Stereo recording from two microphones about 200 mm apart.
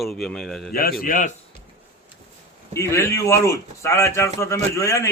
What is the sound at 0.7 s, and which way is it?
Speech, 45° left (ahead or behind).